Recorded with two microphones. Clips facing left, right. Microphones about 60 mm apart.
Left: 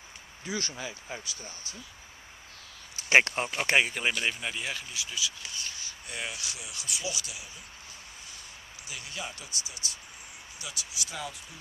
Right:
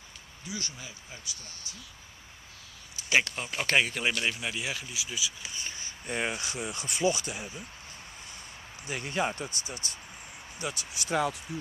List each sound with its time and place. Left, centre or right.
0.7 s speech: left
3.1 s speech: left
3.6 s speech: centre; by 7.6 s right
8.8 s speech: right